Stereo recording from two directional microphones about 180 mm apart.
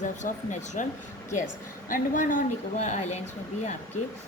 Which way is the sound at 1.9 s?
45° left (ahead or behind).